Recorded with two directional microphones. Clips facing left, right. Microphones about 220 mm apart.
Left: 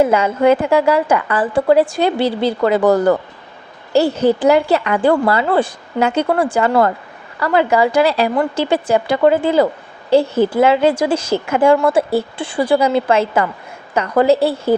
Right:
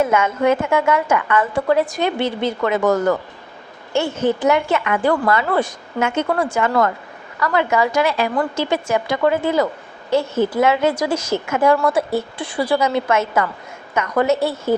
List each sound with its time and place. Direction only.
0.0 s a woman's voice: 30° left (ahead or behind)